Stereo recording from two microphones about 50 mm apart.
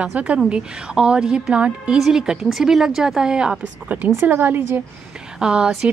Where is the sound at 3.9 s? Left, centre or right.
Right.